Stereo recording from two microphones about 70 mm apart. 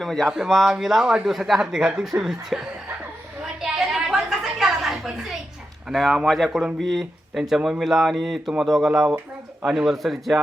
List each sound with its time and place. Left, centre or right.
0.0 s a man's voice: centre
3.6 s a sound: centre
5.9 s a man's voice: centre
8.9 s speech: centre
9.6 s a man's voice: centre